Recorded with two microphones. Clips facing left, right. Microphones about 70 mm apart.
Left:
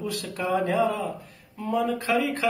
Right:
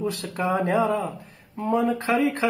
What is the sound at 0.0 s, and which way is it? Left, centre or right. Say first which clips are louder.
Speech: right 3 dB; right.